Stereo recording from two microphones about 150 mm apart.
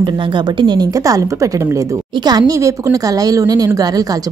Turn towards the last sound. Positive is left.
turn(degrees=-25)  # may be behind; listen again after turning